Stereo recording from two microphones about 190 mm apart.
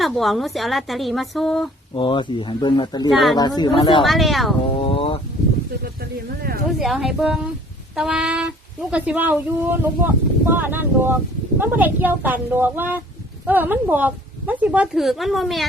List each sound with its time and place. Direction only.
0.0 s a woman's voice: centre (ahead or behind)
2.0 s speech: 25° left (ahead or behind)
4.0 s a woman's voice: centre (ahead or behind)
4.8 s a sound: 30° left (ahead or behind)
6.7 s a woman's voice: centre (ahead or behind)